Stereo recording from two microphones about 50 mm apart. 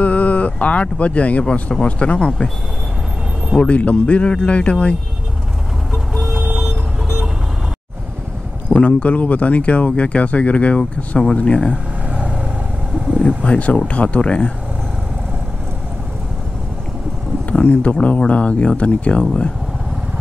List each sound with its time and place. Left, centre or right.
0.0 s speech: left
3.5 s speech: left
8.6 s speech: left
12.1 s vehicle: right
13.4 s speech: left
17.5 s speech: left